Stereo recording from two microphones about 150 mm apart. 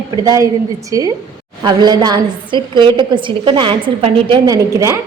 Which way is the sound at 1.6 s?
25° right (ahead or behind).